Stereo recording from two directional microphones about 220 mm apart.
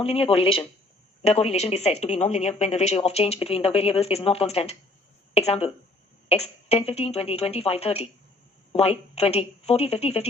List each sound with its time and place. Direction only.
0.0 s speech: 25° left (ahead or behind)